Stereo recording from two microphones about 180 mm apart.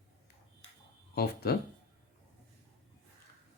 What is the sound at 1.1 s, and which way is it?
Speech, 60° left (ahead or behind).